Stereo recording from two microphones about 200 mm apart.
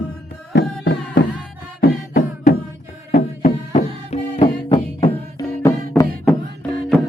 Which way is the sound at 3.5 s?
30° left (ahead or behind).